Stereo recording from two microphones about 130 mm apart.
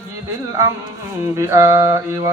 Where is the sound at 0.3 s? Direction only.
25° right (ahead or behind).